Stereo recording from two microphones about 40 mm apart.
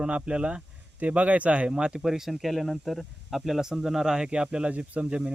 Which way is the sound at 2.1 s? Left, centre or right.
Centre.